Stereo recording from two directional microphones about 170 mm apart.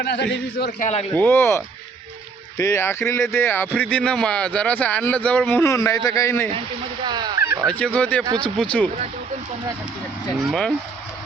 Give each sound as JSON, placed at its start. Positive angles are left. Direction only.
{"t": 0.0, "sound": "a man's voice", "side_deg": 90}
{"t": 0.8, "sound": "speech", "side_deg": 40}
{"t": 1.1, "sound": "speech", "side_deg": 10}
{"t": 7.0, "sound": "speech", "side_deg": -25}
{"t": 7.7, "sound": "speech", "side_deg": 5}
{"t": 8.2, "sound": "speech", "side_deg": -25}
{"t": 8.5, "sound": "speech", "side_deg": 5}